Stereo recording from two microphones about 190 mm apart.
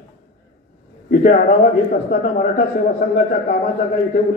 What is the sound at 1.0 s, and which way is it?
A man's voice, 45° left (ahead or behind).